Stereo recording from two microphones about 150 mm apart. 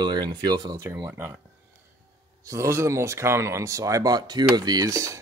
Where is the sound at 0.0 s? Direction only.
30° right (ahead or behind).